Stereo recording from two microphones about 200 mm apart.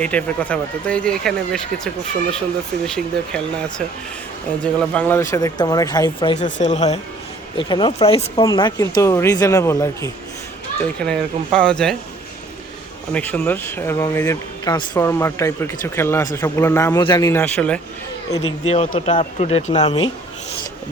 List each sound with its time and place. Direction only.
0.0 s speech: 5° left (ahead or behind); by 6.3 s 20° left (ahead or behind)
6.4 s speech: 35° left (ahead or behind)
7.5 s speech: 25° left (ahead or behind)
10.8 s speech: 5° left (ahead or behind)
13.1 s speech: 10° left (ahead or behind)
18.3 s speech: 30° left (ahead or behind)